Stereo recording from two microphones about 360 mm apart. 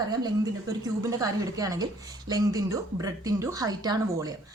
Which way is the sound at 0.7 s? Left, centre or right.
Centre.